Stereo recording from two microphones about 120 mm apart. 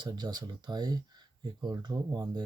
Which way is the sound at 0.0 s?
35° right (ahead or behind).